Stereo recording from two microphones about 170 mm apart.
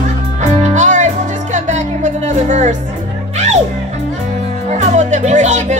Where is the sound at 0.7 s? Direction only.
45° right (ahead or behind).